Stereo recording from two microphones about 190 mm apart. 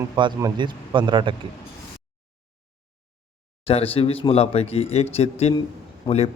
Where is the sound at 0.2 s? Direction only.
20° right (ahead or behind).